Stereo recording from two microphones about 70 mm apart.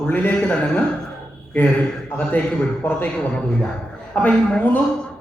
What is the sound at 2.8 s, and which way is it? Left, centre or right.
Speech, left.